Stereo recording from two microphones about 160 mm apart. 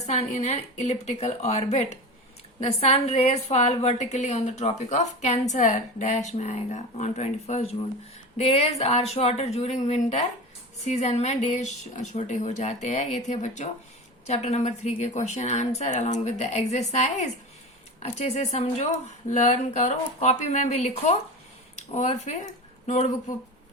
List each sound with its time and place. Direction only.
0.0 s a woman's voice: 40° left (ahead or behind)